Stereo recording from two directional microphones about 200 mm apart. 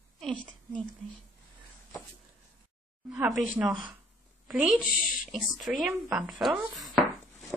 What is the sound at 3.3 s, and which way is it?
A woman's voice, 5° right (ahead or behind).